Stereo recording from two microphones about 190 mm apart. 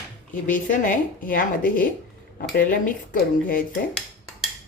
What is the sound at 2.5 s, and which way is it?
Speech, 50° left (ahead or behind).